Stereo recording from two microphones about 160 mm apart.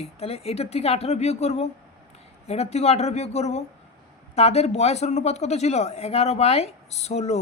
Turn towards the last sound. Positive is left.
turn(degrees=40)  # may be behind; listen again after turning